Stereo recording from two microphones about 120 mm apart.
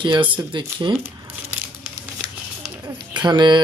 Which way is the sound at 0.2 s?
40° right (ahead or behind).